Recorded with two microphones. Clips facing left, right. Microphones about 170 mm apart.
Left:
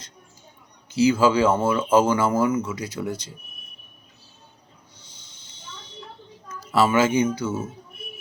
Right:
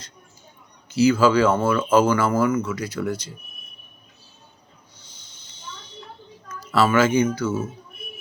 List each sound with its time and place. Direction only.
0.9 s speech: 20° left (ahead or behind)
6.7 s speech: 20° left (ahead or behind)